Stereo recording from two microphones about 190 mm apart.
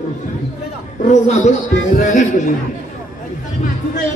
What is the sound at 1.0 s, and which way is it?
A man's voice, 40° left (ahead or behind).